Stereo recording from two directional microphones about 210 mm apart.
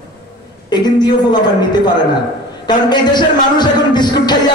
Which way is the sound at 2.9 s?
20° left (ahead or behind).